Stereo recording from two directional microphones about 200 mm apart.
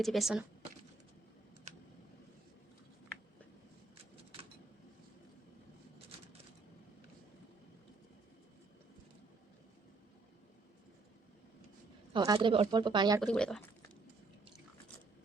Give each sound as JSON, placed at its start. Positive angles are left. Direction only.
{"t": 0.0, "sound": "speech", "side_deg": 0}
{"t": 1.7, "sound": "a sound", "side_deg": -35}
{"t": 12.1, "sound": "a woman's voice", "side_deg": -20}
{"t": 13.2, "sound": "speech", "side_deg": 5}